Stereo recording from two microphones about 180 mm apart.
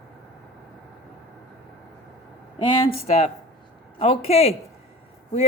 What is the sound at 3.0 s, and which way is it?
A woman's voice, 35° left (ahead or behind).